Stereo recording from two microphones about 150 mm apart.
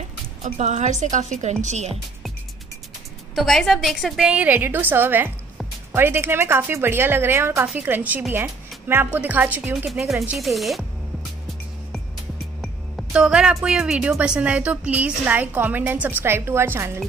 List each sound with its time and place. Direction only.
0.4 s a woman's voice: 50° right (ahead or behind)
3.3 s speech: centre (ahead or behind)
9.8 s speech: centre (ahead or behind)
12.6 s speech: 5° right (ahead or behind)